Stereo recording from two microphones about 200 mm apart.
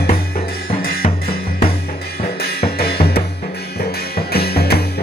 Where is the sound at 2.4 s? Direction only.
50° left (ahead or behind).